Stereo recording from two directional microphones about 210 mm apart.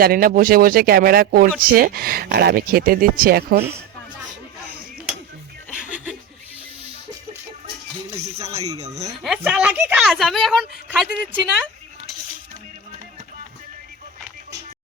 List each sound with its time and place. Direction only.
0.0 s speech: 45° right (ahead or behind)
8.4 s speech: 15° right (ahead or behind)
9.2 s a woman's voice: 5° right (ahead or behind)